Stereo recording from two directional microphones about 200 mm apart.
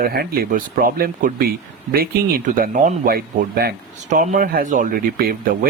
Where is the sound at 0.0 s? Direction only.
50° right (ahead or behind).